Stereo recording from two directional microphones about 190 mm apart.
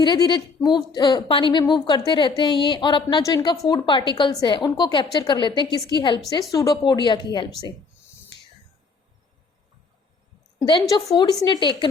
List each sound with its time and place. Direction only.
0.0 s a woman's voice: 25° left (ahead or behind)
10.6 s a woman's voice: 20° left (ahead or behind)